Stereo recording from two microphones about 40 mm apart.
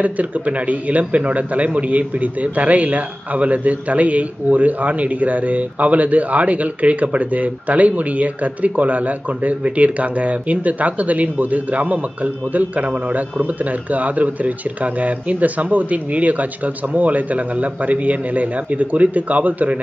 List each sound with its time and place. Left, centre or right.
0.0 s a man's voice: right